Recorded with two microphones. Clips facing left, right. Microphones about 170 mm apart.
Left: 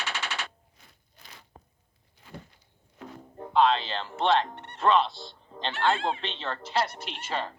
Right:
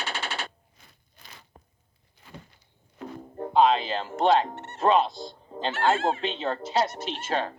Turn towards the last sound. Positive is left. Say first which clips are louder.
# right 5 dB
turn(degrees=-50)  # may be behind; listen again after turning